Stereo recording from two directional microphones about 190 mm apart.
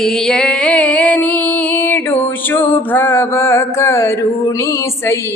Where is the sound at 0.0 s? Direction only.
Centre (ahead or behind).